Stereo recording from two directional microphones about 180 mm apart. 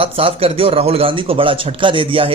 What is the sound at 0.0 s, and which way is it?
Speech, 30° right (ahead or behind).